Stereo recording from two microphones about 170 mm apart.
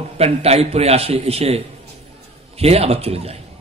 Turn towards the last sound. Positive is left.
turn(degrees=-35)  # may be behind; listen again after turning